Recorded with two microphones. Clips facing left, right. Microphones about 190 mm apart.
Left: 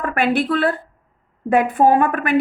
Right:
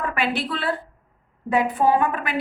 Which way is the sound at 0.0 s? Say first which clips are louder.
Left 6 dB; 50° left (ahead or behind).